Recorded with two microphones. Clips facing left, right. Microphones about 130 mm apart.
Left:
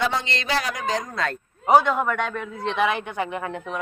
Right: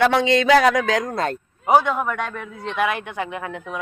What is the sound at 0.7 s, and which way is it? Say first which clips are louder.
Speech: right 6 dB; 90° right.